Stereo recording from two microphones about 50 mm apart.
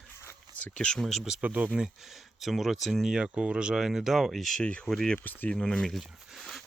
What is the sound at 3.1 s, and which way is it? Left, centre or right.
Speech, centre.